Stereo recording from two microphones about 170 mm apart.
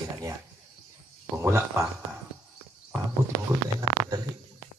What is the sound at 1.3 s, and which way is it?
Speech, 15° right (ahead or behind).